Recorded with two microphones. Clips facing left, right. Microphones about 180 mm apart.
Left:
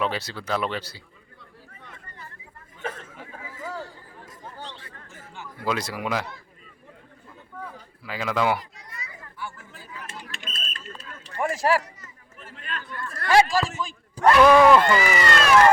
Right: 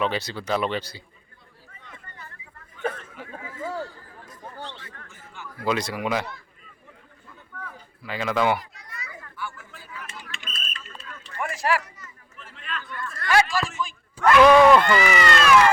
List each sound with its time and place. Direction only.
0.0 s speech: 5° left (ahead or behind)
4.3 s chatter: 30° left (ahead or behind)
5.6 s speech: centre (ahead or behind)
8.0 s speech: 5° left (ahead or behind)
8.7 s a sound: 25° left (ahead or behind)
12.4 s a man's voice: 40° left (ahead or behind)
14.4 s speech: 5° left (ahead or behind)
15.0 s speech: 35° left (ahead or behind)